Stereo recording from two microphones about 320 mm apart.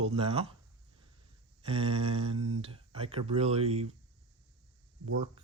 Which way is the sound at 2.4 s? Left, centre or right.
Right.